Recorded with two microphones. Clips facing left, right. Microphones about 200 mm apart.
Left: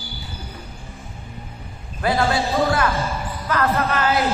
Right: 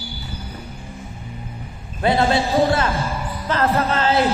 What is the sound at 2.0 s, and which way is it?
Speech, 25° right (ahead or behind).